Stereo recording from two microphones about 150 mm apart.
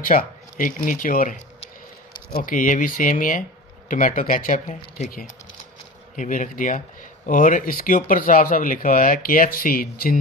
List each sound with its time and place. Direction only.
0.1 s speech: 60° left (ahead or behind)